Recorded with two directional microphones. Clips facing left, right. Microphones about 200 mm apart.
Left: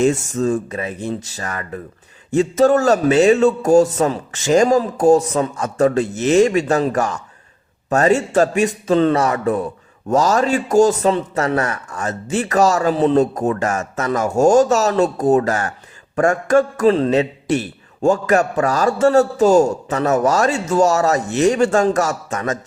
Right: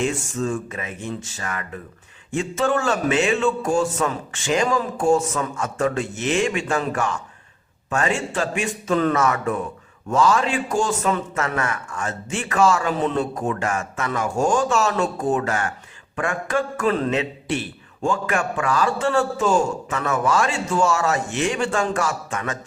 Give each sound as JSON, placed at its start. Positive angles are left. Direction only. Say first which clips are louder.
{"t": 0.0, "sound": "a man's voice", "louder": "left 7 dB", "side_deg": 40}